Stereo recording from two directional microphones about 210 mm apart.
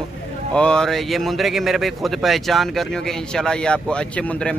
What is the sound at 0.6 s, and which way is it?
Speech, 5° left (ahead or behind).